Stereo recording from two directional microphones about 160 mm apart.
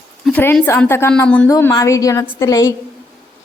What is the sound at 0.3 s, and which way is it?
A woman's voice, 5° left (ahead or behind).